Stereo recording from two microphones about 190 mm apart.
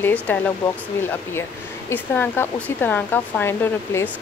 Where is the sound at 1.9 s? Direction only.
10° left (ahead or behind).